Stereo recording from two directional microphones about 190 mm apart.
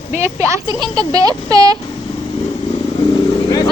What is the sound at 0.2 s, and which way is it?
Speech, 15° right (ahead or behind).